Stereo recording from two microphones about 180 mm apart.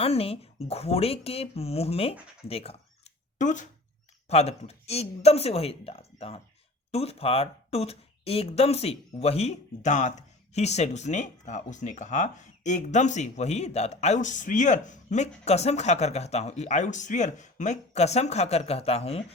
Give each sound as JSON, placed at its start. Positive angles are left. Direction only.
{"t": 0.0, "sound": "speech", "side_deg": 35}
{"t": 2.5, "sound": "a sound", "side_deg": 35}
{"t": 4.3, "sound": "speech", "side_deg": 35}